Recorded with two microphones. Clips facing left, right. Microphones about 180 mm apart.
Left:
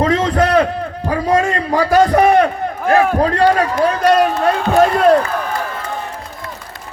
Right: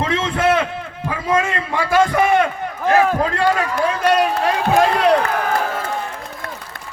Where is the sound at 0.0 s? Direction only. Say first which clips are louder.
Left 4 dB; 40° left (ahead or behind).